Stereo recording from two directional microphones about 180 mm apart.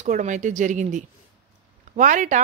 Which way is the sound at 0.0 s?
40° right (ahead or behind).